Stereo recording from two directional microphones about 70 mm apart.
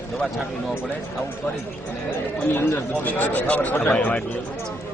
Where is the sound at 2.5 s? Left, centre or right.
Left.